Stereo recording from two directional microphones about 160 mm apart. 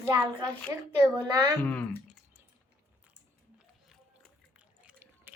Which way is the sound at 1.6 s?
10° left (ahead or behind).